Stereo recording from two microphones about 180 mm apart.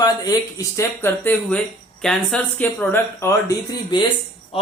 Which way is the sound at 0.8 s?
10° left (ahead or behind).